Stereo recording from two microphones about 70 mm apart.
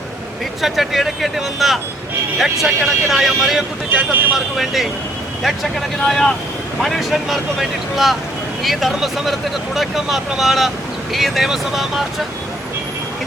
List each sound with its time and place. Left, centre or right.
0.6 s speech: centre
3.9 s speech: right
4.5 s speech: centre
6.1 s speech: centre